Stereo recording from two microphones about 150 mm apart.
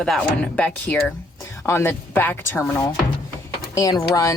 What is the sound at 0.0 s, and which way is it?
Speech, centre (ahead or behind).